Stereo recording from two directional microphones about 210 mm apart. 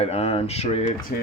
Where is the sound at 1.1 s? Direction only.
40° left (ahead or behind).